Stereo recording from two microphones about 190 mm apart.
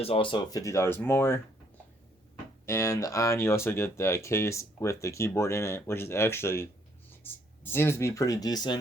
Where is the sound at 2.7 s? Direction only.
15° left (ahead or behind).